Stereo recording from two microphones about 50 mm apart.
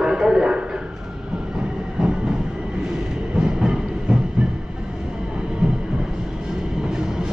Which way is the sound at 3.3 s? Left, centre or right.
Centre.